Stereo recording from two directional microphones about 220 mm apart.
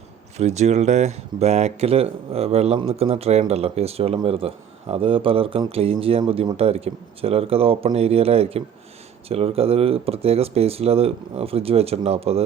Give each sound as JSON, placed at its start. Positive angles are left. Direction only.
{"t": 0.3, "sound": "speech", "side_deg": -30}